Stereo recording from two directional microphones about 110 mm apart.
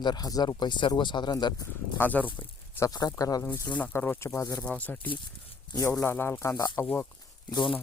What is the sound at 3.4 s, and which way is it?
Speech, 20° left (ahead or behind).